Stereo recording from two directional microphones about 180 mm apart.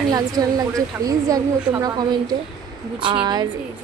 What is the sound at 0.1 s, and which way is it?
Speech, 20° right (ahead or behind).